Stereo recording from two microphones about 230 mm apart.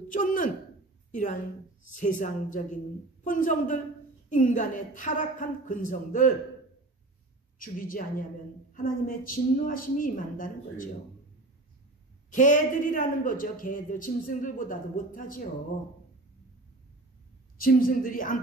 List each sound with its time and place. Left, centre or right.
0.1 s a sound: left
1.1 s a woman's voice: left
7.5 s a woman's voice: left
12.3 s a man's voice: left
17.6 s a man's voice: left